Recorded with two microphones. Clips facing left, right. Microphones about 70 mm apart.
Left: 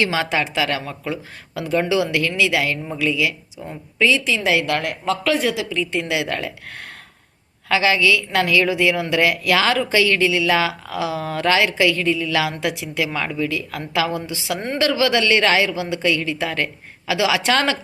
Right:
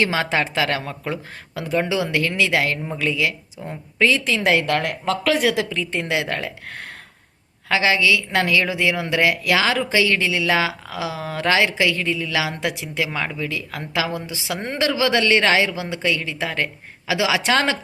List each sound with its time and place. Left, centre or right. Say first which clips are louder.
0.0 s speech: even; right
1.6 s a woman's voice: left 2 dB; centre; by 3.3 s right
3.6 s a woman's voice: even; right
4.0 s speech: even; right
5.2 s speech: right 1 dB; right
5.7 s a woman's voice: left 1 dB; right